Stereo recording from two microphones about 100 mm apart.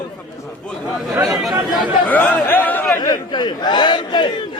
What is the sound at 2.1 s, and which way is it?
Speech, 15° left (ahead or behind).